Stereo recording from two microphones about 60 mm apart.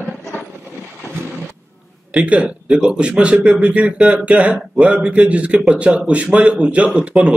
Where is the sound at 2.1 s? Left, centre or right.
Right.